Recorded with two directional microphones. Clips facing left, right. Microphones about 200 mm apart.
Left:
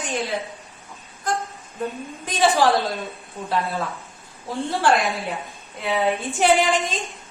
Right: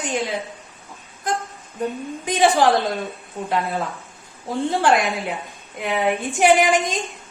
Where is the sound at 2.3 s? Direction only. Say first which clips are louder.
Right 2 dB; 15° right (ahead or behind).